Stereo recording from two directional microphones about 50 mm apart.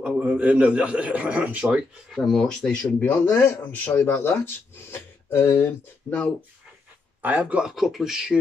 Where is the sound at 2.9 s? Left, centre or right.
Left.